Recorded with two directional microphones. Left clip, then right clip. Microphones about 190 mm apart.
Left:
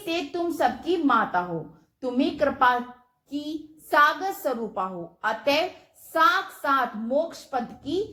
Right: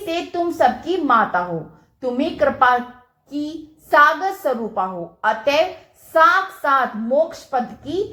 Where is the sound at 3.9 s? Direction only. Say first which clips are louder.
Right 6 dB; 35° left (ahead or behind).